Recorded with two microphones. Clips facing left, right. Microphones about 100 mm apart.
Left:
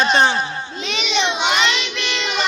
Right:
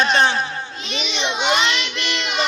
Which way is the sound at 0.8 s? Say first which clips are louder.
Left 8 dB; 85° left.